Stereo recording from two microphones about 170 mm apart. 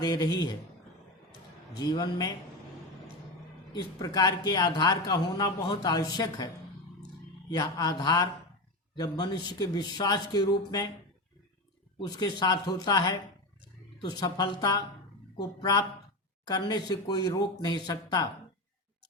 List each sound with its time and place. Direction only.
0.0 s speech: 25° left (ahead or behind)
1.8 s speech: 25° left (ahead or behind)
3.7 s speech: 25° left (ahead or behind)
7.5 s speech: 20° left (ahead or behind)
11.9 s speech: 25° left (ahead or behind)